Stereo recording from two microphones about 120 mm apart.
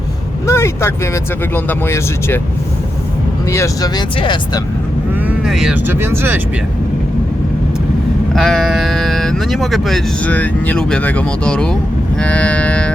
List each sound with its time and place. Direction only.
0.4 s speech: 20° left (ahead or behind)
3.5 s speech: 25° left (ahead or behind)
5.2 s vehicle: 5° right (ahead or behind)
5.7 s speech: 15° right (ahead or behind)
8.4 s speech: centre (ahead or behind)
10.2 s speech: 15° left (ahead or behind)